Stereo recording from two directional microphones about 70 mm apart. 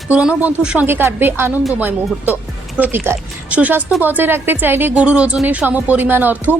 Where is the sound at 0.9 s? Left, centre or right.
Right.